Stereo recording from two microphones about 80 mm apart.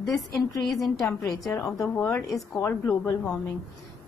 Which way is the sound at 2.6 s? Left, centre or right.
Left.